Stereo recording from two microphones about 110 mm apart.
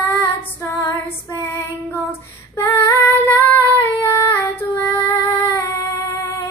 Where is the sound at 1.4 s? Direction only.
20° left (ahead or behind).